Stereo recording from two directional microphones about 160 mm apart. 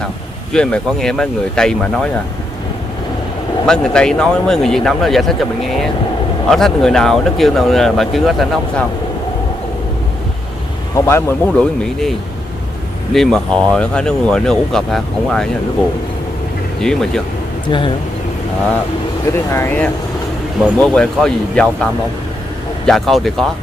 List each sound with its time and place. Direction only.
0.5 s speech: 5° left (ahead or behind)
3.6 s speech: 5° left (ahead or behind)
11.0 s speech: 15° left (ahead or behind)
11.8 s speech: centre (ahead or behind)
16.8 s speech: 5° left (ahead or behind)
17.6 s speech: 30° left (ahead or behind)
19.3 s speech: 15° left (ahead or behind)
22.8 s speech: centre (ahead or behind)